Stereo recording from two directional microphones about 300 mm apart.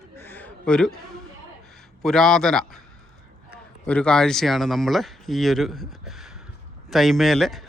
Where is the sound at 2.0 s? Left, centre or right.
Centre.